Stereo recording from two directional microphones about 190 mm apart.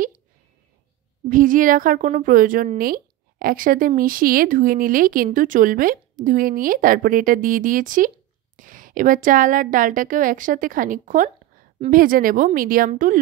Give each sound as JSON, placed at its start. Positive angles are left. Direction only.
{"t": 1.3, "sound": "a woman's voice", "side_deg": -45}